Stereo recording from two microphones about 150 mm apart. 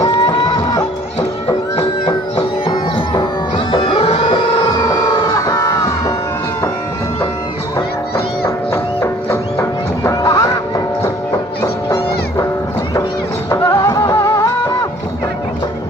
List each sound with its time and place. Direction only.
0.0 s music: 40° left (ahead or behind)
3.7 s music: 35° left (ahead or behind)
8.7 s music: 15° left (ahead or behind)
13.5 s music: 20° left (ahead or behind)